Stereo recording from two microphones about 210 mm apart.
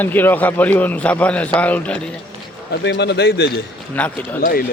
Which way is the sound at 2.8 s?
55° left (ahead or behind).